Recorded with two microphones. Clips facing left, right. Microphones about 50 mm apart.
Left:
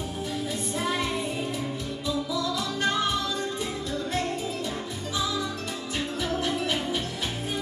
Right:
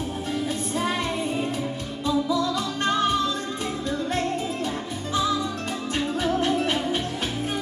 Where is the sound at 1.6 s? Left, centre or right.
Centre.